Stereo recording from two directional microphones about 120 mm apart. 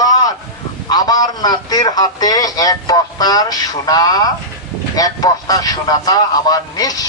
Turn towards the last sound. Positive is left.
turn(degrees=30)  # may be behind; listen again after turning